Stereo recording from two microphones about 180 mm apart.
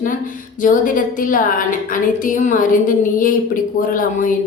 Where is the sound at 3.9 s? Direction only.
50° left (ahead or behind).